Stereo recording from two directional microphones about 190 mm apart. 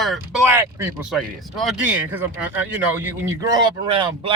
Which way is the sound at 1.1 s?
Centre (ahead or behind).